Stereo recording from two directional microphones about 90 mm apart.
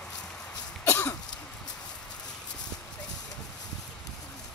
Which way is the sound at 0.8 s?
30° left (ahead or behind).